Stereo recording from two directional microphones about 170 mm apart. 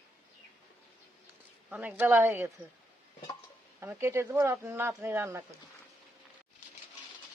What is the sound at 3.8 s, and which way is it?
Speech, 15° right (ahead or behind).